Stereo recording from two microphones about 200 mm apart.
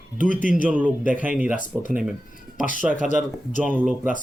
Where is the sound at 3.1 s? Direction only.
40° left (ahead or behind).